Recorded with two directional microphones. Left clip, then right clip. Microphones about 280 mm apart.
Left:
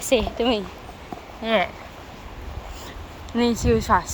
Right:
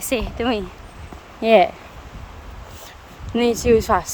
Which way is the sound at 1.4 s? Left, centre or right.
Right.